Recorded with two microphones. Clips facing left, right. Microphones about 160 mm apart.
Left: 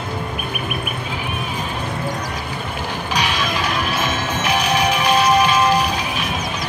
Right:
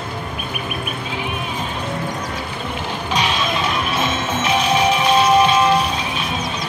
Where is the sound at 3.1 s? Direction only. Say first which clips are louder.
Right 2 dB; 25° right (ahead or behind).